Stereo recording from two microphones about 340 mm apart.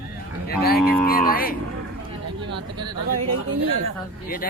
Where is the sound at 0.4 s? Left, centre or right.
Left.